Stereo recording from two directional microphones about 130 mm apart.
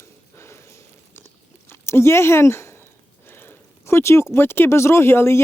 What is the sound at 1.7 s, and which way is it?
Speech, 20° left (ahead or behind).